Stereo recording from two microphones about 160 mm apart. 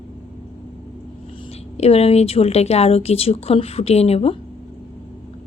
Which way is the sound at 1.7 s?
40° left (ahead or behind).